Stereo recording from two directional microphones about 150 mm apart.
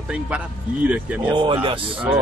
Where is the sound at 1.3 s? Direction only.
30° right (ahead or behind).